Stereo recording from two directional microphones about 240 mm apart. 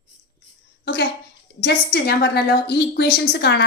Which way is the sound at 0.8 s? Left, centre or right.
Left.